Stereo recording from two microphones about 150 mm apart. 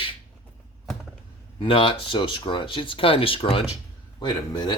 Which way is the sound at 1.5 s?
35° left (ahead or behind).